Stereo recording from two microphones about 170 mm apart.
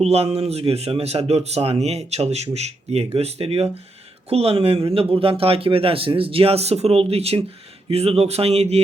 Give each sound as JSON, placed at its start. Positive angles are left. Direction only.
{"t": 0.0, "sound": "speech", "side_deg": -40}